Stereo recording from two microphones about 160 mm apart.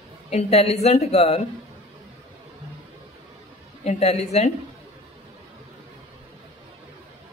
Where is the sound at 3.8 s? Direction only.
40° left (ahead or behind).